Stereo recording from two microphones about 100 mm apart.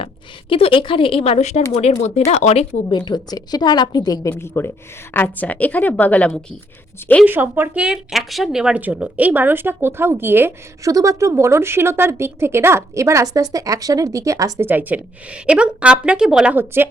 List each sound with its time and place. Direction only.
0.0 s a woman's voice: 65° left (ahead or behind); by 2.6 s 90° left
2.9 s a woman's voice: 45° left (ahead or behind); by 6.4 s 15° left (ahead or behind)
7.3 s speech: 20° right (ahead or behind)
7.8 s a woman's voice: 5° right (ahead or behind); by 10.5 s 20° right (ahead or behind)
10.8 s speech: 35° right (ahead or behind)
14.6 s a woman's voice: 20° right (ahead or behind)
16.6 s speech: 20° right (ahead or behind)